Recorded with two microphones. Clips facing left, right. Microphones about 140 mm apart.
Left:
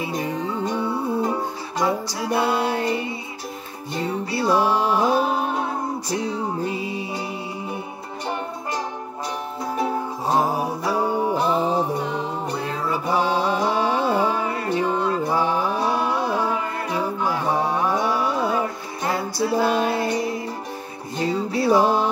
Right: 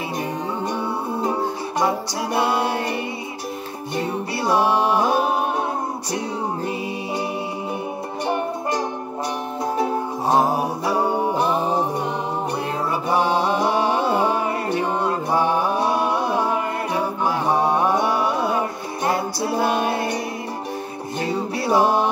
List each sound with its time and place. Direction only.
1.8 s music: 20° right (ahead or behind)
4.6 s music: 60° right (ahead or behind)
5.0 s music: 15° right (ahead or behind)
10.3 s music: 20° right (ahead or behind)
13.1 s mantra: 20° right (ahead or behind)
18.6 s music: 25° right (ahead or behind)
21.6 s music: 15° right (ahead or behind)